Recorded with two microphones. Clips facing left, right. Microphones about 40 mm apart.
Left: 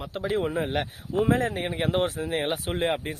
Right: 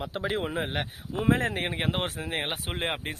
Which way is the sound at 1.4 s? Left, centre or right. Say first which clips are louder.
Left 1 dB; right.